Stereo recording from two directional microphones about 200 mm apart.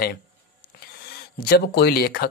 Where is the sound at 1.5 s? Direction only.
55° left (ahead or behind).